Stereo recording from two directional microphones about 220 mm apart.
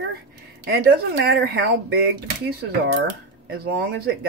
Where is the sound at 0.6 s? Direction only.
45° right (ahead or behind).